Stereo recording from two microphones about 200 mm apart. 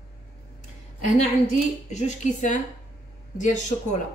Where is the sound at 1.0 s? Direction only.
35° left (ahead or behind).